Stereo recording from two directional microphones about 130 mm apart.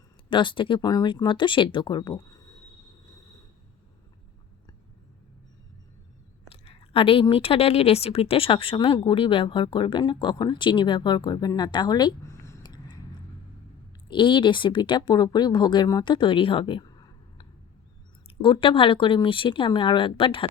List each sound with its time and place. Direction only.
0.3 s speech: 40° left (ahead or behind)
6.5 s speech: 45° left (ahead or behind)
12.3 s a sound: 20° left (ahead or behind)
12.6 s a sound: 30° left (ahead or behind)
14.1 s speech: 40° left (ahead or behind)
18.4 s speech: 40° left (ahead or behind)